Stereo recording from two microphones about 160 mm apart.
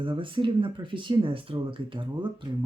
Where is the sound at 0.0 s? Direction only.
30° right (ahead or behind).